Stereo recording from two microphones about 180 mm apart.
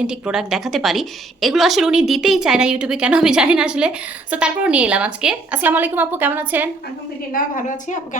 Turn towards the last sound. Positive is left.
turn(degrees=45)  # may be behind; listen again after turning